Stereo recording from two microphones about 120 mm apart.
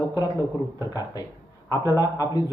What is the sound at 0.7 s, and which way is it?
A man's voice, 30° left (ahead or behind).